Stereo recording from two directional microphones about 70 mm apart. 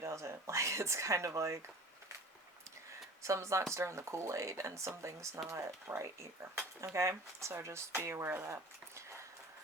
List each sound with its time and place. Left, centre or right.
0.0 s speech: right
3.2 s speech: right
9.0 s a sound: right